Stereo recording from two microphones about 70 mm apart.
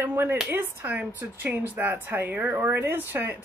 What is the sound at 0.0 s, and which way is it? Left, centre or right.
Speech, right.